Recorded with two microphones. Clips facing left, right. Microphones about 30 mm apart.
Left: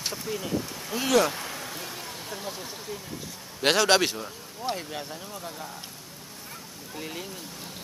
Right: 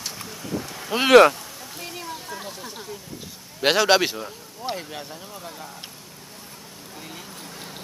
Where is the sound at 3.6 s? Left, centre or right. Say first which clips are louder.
Right 3 dB; centre.